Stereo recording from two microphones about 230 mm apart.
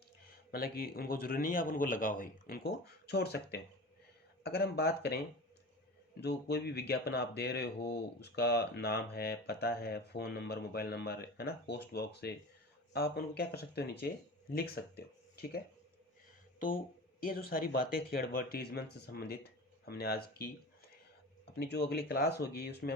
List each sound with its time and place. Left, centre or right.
0.3 s speech: left
21.5 s speech: left